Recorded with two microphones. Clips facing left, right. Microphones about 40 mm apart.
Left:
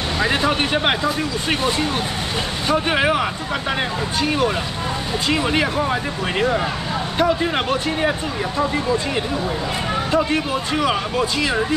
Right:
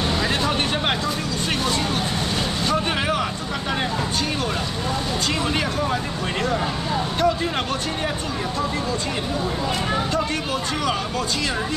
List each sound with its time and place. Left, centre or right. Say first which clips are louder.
0.2 s speech: left 3 dB; left
2.7 s speech: left 6 dB; centre
5.3 s speech: left 7 dB; centre
7.2 s speech: left 4 dB; centre
10.1 s speech: left 4 dB; centre